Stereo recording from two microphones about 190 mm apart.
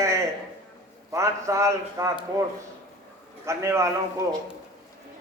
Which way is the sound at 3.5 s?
15° right (ahead or behind).